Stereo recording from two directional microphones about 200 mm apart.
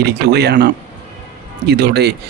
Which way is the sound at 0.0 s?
55° right (ahead or behind).